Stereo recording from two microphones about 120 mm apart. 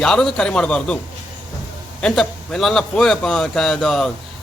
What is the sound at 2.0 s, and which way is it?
A man's voice, 5° left (ahead or behind).